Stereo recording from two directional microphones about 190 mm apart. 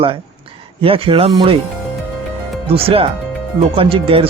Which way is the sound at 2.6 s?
30° right (ahead or behind).